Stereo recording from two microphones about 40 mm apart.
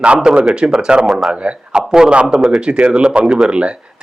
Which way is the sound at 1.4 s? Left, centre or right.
Right.